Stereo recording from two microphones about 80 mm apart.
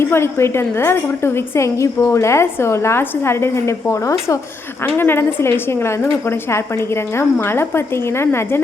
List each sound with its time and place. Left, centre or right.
0.0 s a woman's voice: left
4.8 s a woman's voice: left